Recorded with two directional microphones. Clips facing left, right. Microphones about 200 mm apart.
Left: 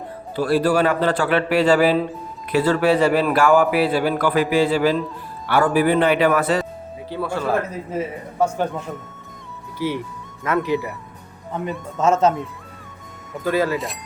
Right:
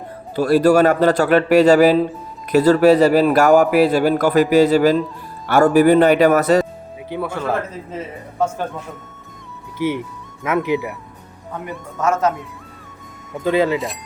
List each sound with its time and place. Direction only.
0.3 s a man's voice: 45° right (ahead or behind)
7.1 s speech: 20° right (ahead or behind)
7.3 s a man's voice: 10° left (ahead or behind)
9.7 s speech: 20° right (ahead or behind)
11.9 s speech: 25° left (ahead or behind)
13.4 s speech: 20° right (ahead or behind)
13.7 s speech: centre (ahead or behind)